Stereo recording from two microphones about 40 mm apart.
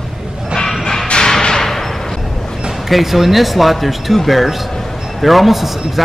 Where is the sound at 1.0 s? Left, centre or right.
Centre.